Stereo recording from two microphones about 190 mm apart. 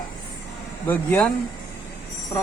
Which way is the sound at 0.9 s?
10° left (ahead or behind).